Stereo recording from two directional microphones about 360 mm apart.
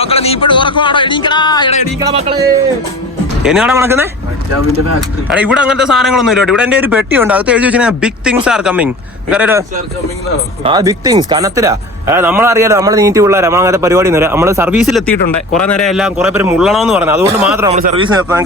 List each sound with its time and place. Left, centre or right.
0.0 s speech: centre
2.0 s speech: centre
3.4 s a man's voice: centre
5.3 s a man's voice: centre
17.7 s speech: centre